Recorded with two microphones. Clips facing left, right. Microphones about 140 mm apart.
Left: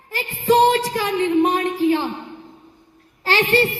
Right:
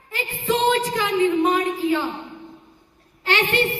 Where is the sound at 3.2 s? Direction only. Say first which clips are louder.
Left 3 dB; 35° left (ahead or behind).